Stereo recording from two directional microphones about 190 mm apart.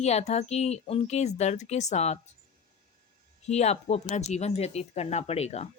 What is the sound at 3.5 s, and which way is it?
Speech, 35° left (ahead or behind).